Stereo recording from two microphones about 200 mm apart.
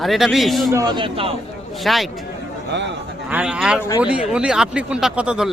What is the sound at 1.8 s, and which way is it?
Speech, centre (ahead or behind).